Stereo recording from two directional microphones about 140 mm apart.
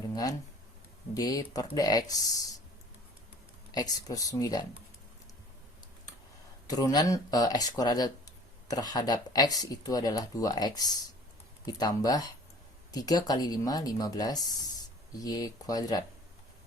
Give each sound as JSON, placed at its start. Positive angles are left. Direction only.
{"t": 0.1, "sound": "a sound", "side_deg": 25}
{"t": 1.1, "sound": "speech", "side_deg": 25}
{"t": 3.7, "sound": "speech", "side_deg": 30}
{"t": 6.7, "sound": "speech", "side_deg": 25}